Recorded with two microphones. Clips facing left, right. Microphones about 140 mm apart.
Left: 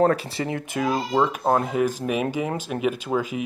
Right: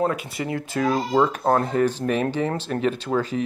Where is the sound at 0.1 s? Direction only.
30° left (ahead or behind).